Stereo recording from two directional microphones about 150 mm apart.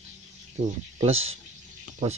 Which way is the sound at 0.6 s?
45° right (ahead or behind).